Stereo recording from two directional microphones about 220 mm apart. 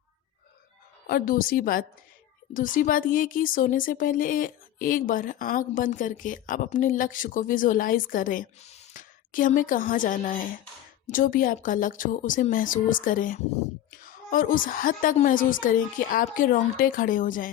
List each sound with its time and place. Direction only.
1.0 s speech: 40° left (ahead or behind)